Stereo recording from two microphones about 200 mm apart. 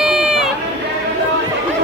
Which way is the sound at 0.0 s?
5° right (ahead or behind).